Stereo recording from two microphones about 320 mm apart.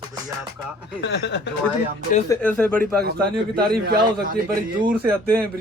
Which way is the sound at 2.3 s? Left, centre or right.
Centre.